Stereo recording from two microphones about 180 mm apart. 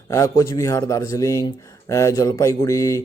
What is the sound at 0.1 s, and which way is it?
A man's voice, 20° left (ahead or behind).